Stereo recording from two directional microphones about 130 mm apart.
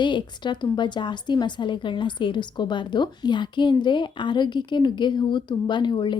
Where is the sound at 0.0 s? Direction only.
35° left (ahead or behind).